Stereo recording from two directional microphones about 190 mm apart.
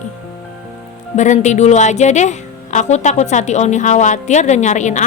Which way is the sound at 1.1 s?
40° left (ahead or behind).